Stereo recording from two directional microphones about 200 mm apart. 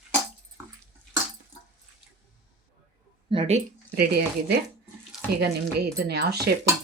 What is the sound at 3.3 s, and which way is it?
Speech, 30° right (ahead or behind).